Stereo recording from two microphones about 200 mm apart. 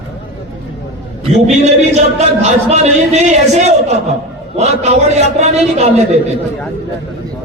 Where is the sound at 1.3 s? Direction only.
35° right (ahead or behind).